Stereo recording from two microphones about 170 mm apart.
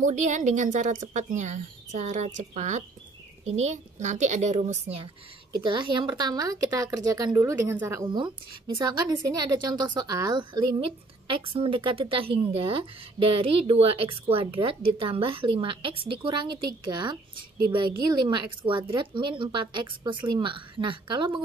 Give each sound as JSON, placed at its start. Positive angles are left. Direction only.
{"t": 0.0, "sound": "a woman's voice", "side_deg": -45}